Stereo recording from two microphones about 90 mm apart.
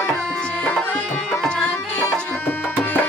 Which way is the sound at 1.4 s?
10° left (ahead or behind).